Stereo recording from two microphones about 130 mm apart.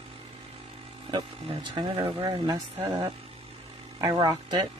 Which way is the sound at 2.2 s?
30° right (ahead or behind).